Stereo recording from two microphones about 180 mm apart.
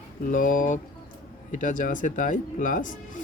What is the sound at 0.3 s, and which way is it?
Speech, 45° left (ahead or behind).